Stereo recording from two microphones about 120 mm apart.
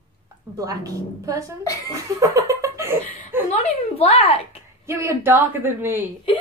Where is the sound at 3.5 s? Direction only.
60° left (ahead or behind).